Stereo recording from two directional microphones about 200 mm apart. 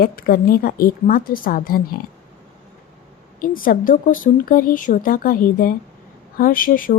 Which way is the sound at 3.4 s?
45° left (ahead or behind).